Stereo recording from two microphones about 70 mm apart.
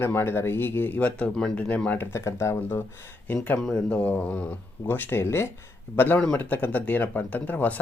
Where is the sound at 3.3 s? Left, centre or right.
Left.